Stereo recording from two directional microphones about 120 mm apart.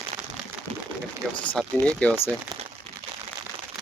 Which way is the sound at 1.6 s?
5° left (ahead or behind).